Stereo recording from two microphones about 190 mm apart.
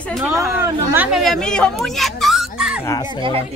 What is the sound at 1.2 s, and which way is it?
Speech, centre (ahead or behind).